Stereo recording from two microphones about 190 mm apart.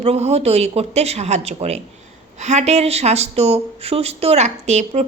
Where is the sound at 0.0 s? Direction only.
35° right (ahead or behind).